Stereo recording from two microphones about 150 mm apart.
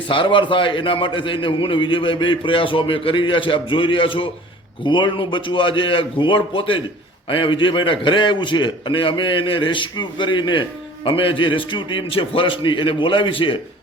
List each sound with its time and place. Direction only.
0.1 s a man's voice: 35° left (ahead or behind)